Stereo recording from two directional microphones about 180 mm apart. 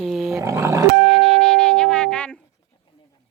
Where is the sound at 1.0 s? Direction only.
Centre (ahead or behind).